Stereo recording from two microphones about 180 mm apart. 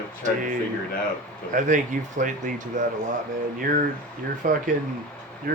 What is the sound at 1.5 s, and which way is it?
Speech, 45° right (ahead or behind).